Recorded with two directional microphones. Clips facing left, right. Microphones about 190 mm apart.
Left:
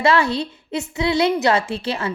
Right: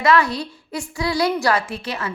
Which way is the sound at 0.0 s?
30° left (ahead or behind).